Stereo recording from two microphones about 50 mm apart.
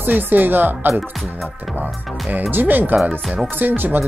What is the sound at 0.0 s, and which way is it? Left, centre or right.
Speech, right.